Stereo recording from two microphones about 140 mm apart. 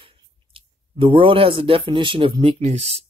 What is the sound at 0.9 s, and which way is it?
Speech, 40° right (ahead or behind).